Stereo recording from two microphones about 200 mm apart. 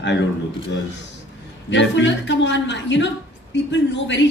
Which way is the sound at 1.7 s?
65° left (ahead or behind).